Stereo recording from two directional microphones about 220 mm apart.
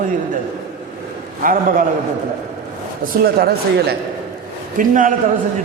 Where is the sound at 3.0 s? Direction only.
45° right (ahead or behind).